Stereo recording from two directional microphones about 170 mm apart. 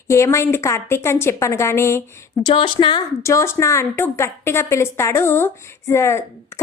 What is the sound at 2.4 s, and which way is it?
A woman's voice, 30° left (ahead or behind).